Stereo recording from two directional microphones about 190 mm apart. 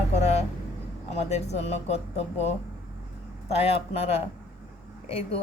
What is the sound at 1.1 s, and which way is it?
Speech, 35° left (ahead or behind).